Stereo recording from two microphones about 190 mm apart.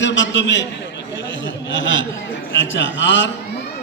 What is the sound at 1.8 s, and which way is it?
A man's voice, 80° left.